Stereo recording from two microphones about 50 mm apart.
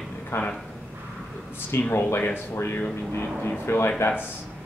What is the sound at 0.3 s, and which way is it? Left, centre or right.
Speech, left.